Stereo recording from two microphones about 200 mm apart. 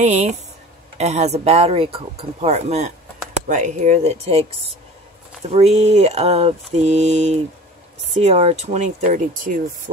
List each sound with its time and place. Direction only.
0.0 s speech: 35° right (ahead or behind)
5.5 s speech: 30° right (ahead or behind)